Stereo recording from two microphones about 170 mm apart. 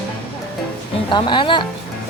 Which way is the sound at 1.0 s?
30° left (ahead or behind).